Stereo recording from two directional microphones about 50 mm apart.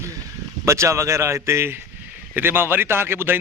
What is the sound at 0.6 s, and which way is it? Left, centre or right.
Speech, right.